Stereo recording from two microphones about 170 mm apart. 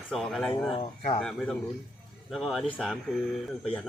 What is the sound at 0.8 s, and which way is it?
Speech, 35° left (ahead or behind).